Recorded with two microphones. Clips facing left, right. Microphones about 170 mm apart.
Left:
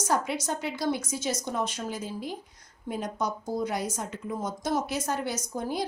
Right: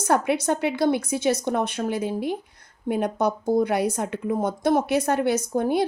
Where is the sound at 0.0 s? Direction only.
60° right (ahead or behind).